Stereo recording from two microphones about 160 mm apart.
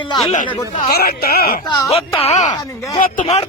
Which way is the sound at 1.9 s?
40° left (ahead or behind).